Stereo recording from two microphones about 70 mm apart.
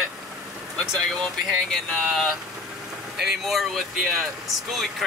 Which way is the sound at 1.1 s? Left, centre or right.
Centre.